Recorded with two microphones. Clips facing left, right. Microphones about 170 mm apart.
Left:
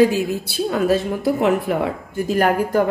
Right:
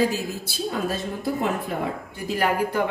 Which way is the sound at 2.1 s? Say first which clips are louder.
Left 6 dB; 50° left (ahead or behind).